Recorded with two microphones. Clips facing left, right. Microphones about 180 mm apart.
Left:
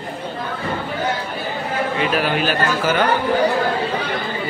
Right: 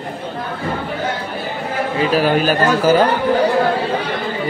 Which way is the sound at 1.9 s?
40° right (ahead or behind).